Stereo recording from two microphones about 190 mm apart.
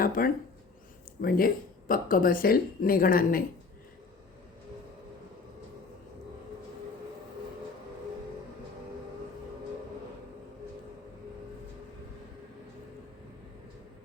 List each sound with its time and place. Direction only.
0.0 s speech: 50° left (ahead or behind)